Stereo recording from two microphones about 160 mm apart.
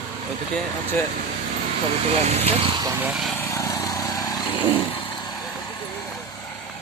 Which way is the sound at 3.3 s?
15° left (ahead or behind).